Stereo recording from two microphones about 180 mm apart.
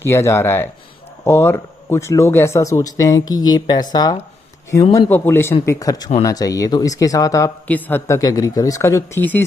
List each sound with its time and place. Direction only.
0.0 s speech: 15° left (ahead or behind)
4.9 s speech: 10° left (ahead or behind)